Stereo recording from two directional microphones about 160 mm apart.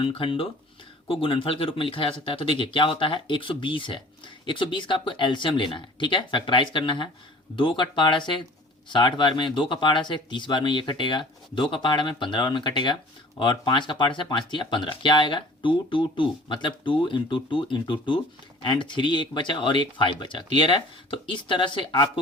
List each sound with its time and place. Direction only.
0.0 s speech: 30° left (ahead or behind)